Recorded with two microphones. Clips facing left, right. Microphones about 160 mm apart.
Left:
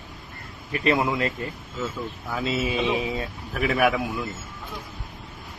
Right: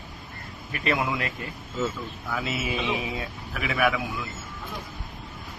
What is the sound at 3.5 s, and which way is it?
Speech, 40° left (ahead or behind).